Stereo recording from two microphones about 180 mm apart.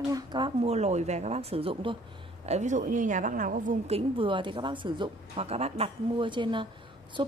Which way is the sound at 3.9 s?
30° right (ahead or behind).